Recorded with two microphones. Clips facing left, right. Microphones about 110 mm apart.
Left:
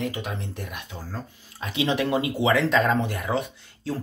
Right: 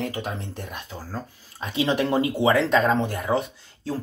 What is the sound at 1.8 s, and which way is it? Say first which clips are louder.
Speech: right 2 dB; 35° right (ahead or behind).